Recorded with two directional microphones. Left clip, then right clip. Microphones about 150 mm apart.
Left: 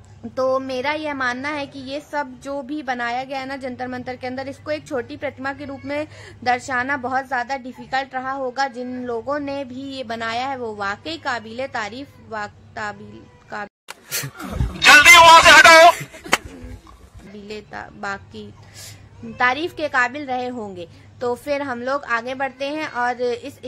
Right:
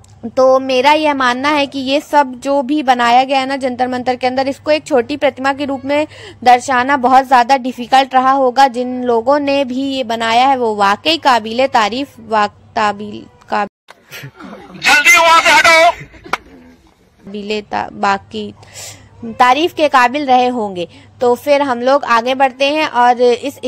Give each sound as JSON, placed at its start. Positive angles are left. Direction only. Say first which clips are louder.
{"t": 0.3, "sound": "a woman's voice", "louder": "right 11 dB", "side_deg": -40}
{"t": 14.8, "sound": "a sound", "louder": "even", "side_deg": 25}
{"t": 17.3, "sound": "a woman's voice", "louder": "right 14 dB", "side_deg": -45}